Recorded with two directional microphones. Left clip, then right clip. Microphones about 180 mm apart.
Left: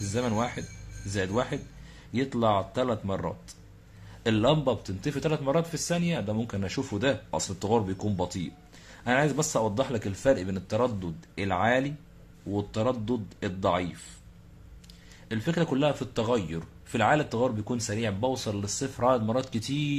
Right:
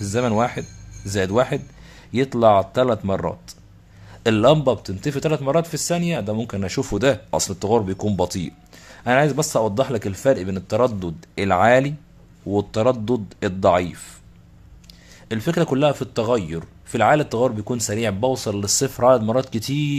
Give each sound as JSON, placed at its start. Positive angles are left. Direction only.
{"t": 0.0, "sound": "a man's voice", "side_deg": -30}
{"t": 15.2, "sound": "a man's voice", "side_deg": -30}